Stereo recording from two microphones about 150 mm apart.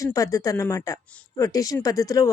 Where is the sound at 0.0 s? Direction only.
20° left (ahead or behind).